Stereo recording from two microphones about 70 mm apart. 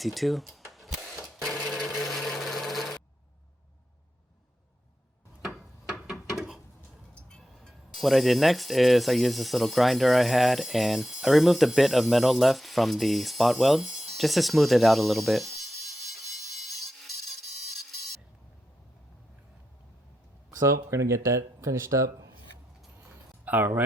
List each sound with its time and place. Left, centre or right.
0.0 s sewing machine: centre
5.4 s a sound: centre
7.4 s speech: centre
20.5 s speech: right
23.5 s speech: right